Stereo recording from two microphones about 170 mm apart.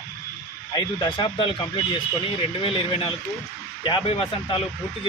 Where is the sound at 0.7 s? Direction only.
25° left (ahead or behind).